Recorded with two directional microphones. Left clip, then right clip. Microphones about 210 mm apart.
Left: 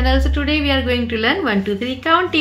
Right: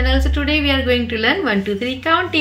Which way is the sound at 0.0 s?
20° left (ahead or behind).